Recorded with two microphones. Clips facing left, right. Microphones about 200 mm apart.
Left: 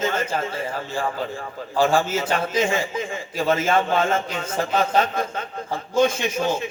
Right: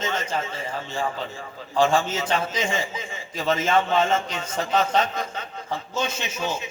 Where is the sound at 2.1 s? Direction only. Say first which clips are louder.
Left 3 dB; 50° left (ahead or behind).